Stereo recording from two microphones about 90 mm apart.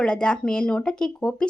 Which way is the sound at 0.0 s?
10° left (ahead or behind).